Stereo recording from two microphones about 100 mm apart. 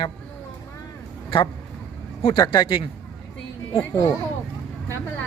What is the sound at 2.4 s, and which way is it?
Speech, 45° left (ahead or behind).